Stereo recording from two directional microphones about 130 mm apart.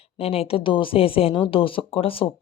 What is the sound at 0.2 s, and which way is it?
Speech, 50° left (ahead or behind).